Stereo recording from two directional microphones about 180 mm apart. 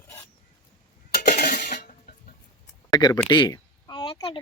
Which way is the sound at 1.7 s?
60° left (ahead or behind).